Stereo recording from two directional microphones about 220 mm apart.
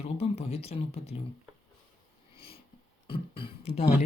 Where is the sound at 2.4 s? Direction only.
25° left (ahead or behind).